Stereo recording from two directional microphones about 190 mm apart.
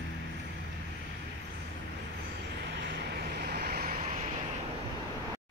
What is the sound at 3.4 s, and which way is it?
Vehicle, 55° right (ahead or behind).